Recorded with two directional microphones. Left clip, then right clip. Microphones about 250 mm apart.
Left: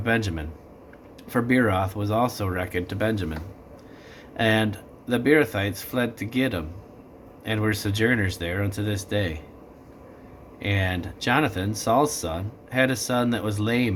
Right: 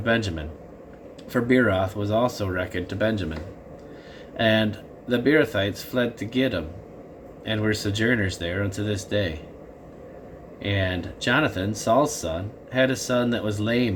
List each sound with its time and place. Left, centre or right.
1.3 s speech: centre
4.4 s speech: centre
10.6 s speech: centre